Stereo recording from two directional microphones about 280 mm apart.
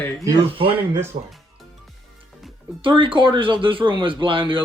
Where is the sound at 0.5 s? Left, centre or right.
Centre.